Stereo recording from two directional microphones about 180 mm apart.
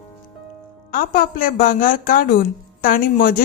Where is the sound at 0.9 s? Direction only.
50° left (ahead or behind).